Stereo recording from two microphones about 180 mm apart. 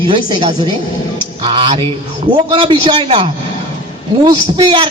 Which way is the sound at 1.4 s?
30° right (ahead or behind).